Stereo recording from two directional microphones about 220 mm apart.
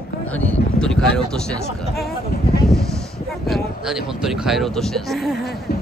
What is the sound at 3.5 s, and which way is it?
Speech, centre (ahead or behind).